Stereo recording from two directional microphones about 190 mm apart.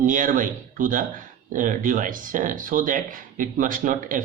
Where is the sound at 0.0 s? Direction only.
45° right (ahead or behind).